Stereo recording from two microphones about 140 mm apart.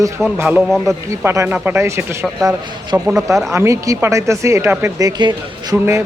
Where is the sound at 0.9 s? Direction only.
20° right (ahead or behind).